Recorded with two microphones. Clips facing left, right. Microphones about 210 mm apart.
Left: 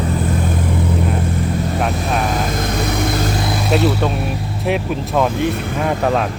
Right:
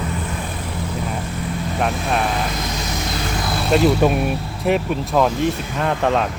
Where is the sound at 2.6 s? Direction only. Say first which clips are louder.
Left 7 dB; 55° left (ahead or behind).